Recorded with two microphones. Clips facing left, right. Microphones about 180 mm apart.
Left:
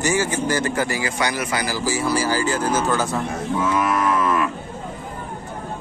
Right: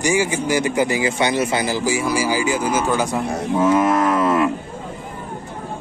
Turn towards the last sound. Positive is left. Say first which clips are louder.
# right 3 dB
turn(degrees=-35)  # may be behind; listen again after turning